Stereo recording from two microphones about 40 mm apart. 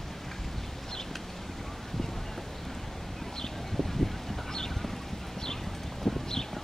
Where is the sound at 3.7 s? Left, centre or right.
Centre.